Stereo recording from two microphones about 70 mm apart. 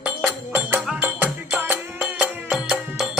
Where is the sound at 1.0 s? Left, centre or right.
Right.